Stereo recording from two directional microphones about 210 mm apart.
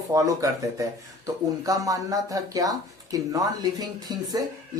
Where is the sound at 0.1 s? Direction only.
15° right (ahead or behind).